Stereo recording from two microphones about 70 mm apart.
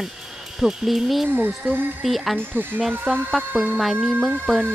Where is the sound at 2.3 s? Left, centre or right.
Right.